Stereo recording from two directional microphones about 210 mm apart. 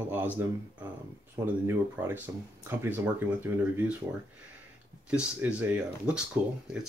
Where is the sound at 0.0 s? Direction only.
10° right (ahead or behind).